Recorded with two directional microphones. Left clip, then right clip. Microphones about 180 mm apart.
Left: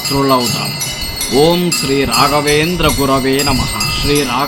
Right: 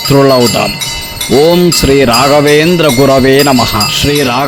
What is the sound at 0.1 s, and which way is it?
Wind chime, 55° right (ahead or behind).